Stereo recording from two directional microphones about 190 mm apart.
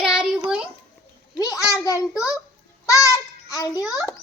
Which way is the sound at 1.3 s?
20° left (ahead or behind).